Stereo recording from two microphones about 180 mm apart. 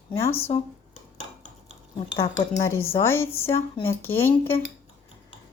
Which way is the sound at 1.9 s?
30° left (ahead or behind).